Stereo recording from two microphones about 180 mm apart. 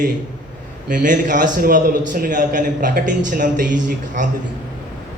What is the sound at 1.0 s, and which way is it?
A man's voice, 45° right (ahead or behind).